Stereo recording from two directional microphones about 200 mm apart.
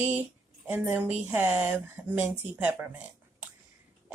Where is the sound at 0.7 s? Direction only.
10° right (ahead or behind).